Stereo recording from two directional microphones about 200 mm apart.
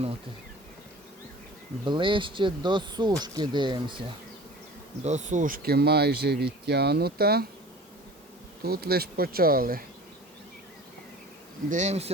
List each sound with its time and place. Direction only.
1.8 s speech: 25° right (ahead or behind)
5.0 s speech: 35° right (ahead or behind); by 7.4 s 50° right (ahead or behind)
8.6 s speech: 50° right (ahead or behind)
11.7 s speech: 35° right (ahead or behind)